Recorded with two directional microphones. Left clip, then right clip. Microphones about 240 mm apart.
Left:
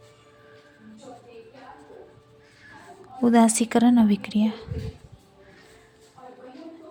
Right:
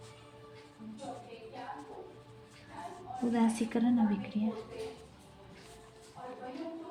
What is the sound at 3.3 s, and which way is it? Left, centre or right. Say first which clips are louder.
Speech: left 13 dB; left.